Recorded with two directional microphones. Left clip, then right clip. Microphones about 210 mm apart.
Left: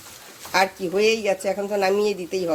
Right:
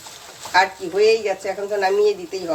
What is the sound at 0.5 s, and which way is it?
Speech, 45° left (ahead or behind).